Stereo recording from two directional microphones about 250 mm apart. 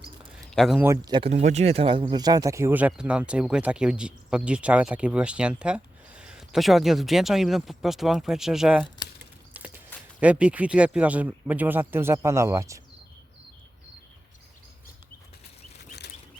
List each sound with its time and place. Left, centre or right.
0.5 s speech: centre
9.5 s a sound: centre
10.2 s speech: centre